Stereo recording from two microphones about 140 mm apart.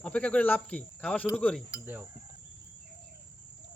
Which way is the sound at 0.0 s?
10° left (ahead or behind).